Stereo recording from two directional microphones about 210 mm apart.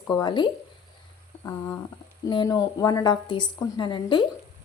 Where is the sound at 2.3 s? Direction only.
20° left (ahead or behind).